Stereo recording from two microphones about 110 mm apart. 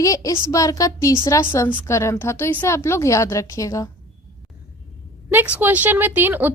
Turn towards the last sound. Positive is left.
turn(degrees=-15)  # may be behind; listen again after turning